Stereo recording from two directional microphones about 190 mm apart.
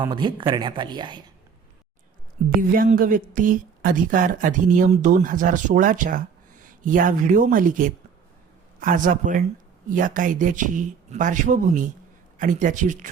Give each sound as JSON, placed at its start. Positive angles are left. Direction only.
{"t": 0.1, "sound": "speech", "side_deg": -25}
{"t": 2.6, "sound": "a woman's voice", "side_deg": -45}